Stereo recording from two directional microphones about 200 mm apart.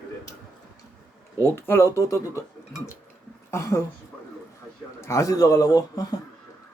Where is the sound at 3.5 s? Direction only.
15° left (ahead or behind).